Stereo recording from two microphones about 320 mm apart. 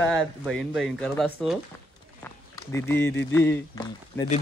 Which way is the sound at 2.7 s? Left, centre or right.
Centre.